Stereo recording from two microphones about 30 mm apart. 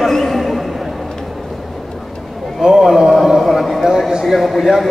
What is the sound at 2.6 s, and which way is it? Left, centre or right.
Speech, centre.